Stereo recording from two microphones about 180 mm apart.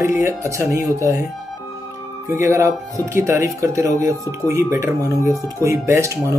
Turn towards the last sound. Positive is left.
turn(degrees=-15)  # may be behind; listen again after turning